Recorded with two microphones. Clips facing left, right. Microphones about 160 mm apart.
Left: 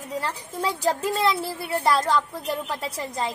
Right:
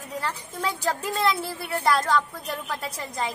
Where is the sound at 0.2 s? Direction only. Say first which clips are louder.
Even; 30° left (ahead or behind).